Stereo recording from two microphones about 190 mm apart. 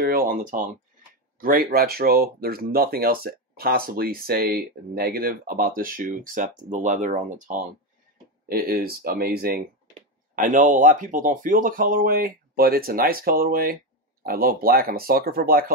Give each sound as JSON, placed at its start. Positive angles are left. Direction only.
{"t": 0.3, "sound": "speech", "side_deg": -45}
{"t": 8.5, "sound": "speech", "side_deg": -50}
{"t": 10.3, "sound": "speech", "side_deg": -45}